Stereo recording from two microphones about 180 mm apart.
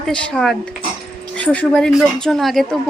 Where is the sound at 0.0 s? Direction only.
5° left (ahead or behind).